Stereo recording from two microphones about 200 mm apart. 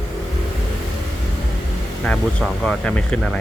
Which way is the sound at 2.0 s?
5° left (ahead or behind).